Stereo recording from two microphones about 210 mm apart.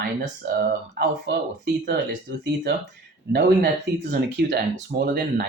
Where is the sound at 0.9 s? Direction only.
50° right (ahead or behind).